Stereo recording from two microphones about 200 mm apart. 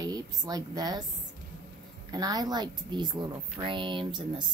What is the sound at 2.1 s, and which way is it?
Speech, 20° right (ahead or behind).